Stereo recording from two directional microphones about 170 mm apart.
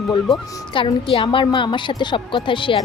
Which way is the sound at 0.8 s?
30° left (ahead or behind).